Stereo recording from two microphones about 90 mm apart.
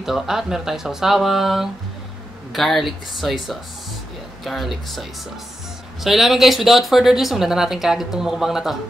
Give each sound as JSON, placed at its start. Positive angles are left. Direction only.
{"t": 0.0, "sound": "speech", "side_deg": -5}
{"t": 6.0, "sound": "speech", "side_deg": 0}